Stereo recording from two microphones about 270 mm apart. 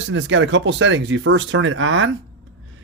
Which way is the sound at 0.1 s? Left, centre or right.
Right.